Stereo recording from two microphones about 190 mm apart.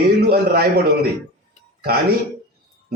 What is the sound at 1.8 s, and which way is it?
Speech, 55° right (ahead or behind).